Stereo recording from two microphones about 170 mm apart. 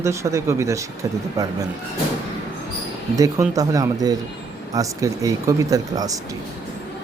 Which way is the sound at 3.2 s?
20° right (ahead or behind).